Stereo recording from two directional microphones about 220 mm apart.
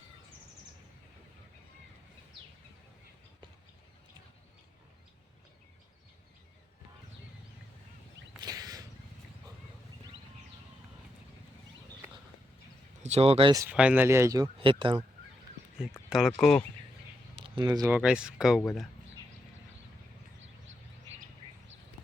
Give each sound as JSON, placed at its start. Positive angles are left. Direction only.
{"t": 8.4, "sound": "a sound", "side_deg": -15}
{"t": 13.0, "sound": "speech", "side_deg": -30}
{"t": 16.0, "sound": "speech", "side_deg": 0}
{"t": 17.3, "sound": "speech", "side_deg": -25}